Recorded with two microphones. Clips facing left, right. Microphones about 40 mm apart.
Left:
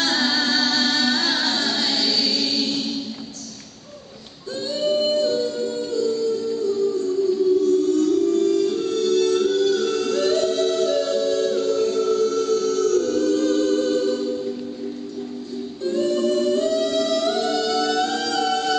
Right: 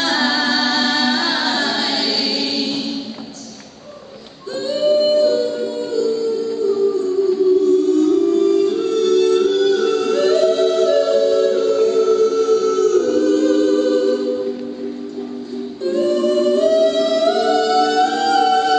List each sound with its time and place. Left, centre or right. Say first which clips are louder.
0.0 s music: right 4 dB; right
4.6 s music: right 6 dB; right
7.2 s music: right 4 dB; right
15.8 s music: right 4 dB; right